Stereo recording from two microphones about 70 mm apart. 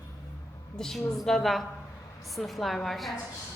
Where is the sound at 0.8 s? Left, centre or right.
Centre.